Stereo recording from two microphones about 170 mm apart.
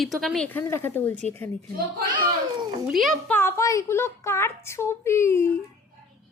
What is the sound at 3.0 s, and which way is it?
A woman's voice, 5° left (ahead or behind).